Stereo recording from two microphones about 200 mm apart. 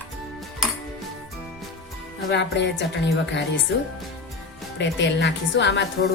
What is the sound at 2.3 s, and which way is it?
Speech, 60° left (ahead or behind).